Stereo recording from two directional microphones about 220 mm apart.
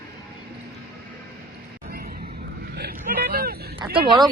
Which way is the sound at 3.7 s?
20° right (ahead or behind).